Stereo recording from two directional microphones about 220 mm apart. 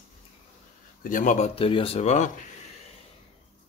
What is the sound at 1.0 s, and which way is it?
Speech, 35° left (ahead or behind).